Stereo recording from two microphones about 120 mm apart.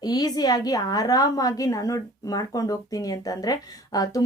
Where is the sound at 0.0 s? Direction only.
35° left (ahead or behind).